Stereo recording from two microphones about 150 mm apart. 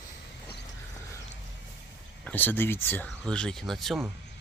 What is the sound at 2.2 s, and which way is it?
Speech, 10° left (ahead or behind).